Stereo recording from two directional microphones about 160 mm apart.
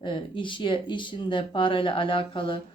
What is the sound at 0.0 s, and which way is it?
Speech, 30° left (ahead or behind).